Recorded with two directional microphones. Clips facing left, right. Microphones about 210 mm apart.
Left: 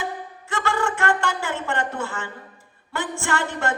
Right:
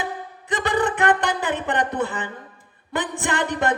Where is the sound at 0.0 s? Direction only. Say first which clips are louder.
Right 1 dB; 15° right (ahead or behind).